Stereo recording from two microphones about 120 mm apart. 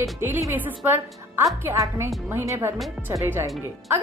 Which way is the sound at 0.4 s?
15° right (ahead or behind).